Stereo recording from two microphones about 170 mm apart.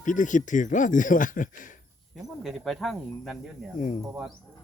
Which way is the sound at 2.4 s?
Centre (ahead or behind).